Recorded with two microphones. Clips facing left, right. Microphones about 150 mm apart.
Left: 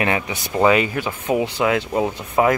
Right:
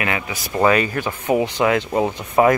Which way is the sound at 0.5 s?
15° left (ahead or behind).